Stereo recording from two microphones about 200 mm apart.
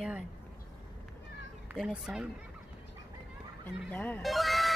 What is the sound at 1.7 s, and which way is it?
Speech, 5° right (ahead or behind).